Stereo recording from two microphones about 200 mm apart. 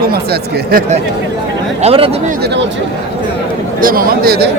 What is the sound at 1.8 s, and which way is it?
Speech, 25° right (ahead or behind).